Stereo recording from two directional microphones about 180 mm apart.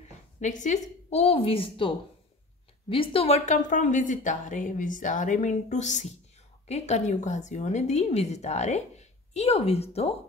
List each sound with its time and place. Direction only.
0.4 s a woman's voice: 45° left (ahead or behind)